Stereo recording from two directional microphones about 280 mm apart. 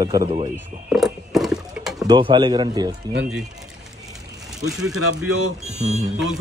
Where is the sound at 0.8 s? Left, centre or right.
Centre.